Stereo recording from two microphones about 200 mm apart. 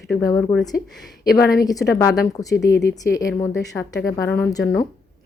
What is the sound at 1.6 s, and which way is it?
A woman's voice, 15° left (ahead or behind).